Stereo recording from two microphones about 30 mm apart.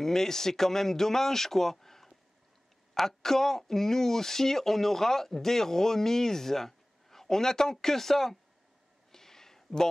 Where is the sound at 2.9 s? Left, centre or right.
Centre.